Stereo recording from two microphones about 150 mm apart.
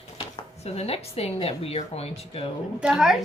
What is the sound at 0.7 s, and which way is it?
A woman's voice, 45° left (ahead or behind).